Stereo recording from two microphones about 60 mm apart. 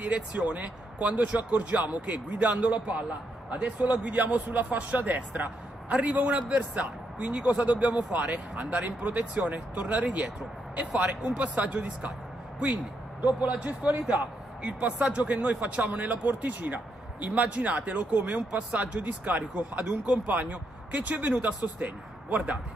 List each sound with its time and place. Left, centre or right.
0.0 s a man's voice: right
13.4 s a man's voice: right